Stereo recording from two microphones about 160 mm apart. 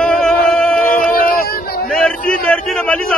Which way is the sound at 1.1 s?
65° left (ahead or behind).